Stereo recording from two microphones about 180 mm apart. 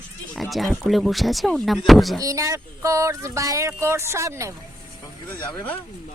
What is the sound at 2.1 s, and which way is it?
Speech, 15° right (ahead or behind).